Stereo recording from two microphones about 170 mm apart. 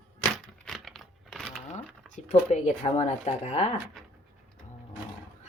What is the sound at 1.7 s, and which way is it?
Speech, 40° left (ahead or behind).